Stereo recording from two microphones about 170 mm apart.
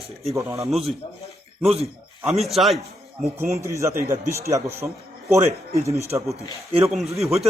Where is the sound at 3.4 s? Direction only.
15° right (ahead or behind).